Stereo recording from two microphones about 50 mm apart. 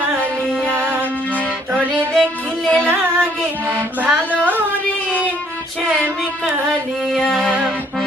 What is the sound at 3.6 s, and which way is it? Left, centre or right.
Music, right.